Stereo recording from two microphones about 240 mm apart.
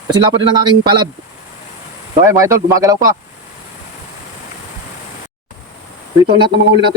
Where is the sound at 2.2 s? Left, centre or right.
Centre.